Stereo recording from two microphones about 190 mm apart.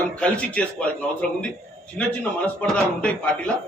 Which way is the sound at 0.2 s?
5° left (ahead or behind).